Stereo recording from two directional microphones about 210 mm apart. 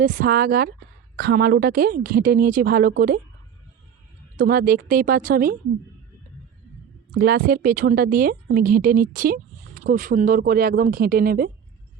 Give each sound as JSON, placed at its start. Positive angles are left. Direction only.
{"t": 0.0, "sound": "speech", "side_deg": -40}
{"t": 4.4, "sound": "speech", "side_deg": -40}
{"t": 7.1, "sound": "speech", "side_deg": -45}